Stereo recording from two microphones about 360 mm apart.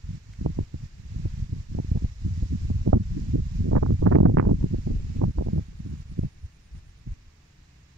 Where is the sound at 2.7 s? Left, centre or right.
Right.